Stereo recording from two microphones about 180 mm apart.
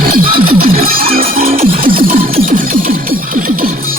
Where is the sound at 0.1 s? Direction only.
55° right (ahead or behind).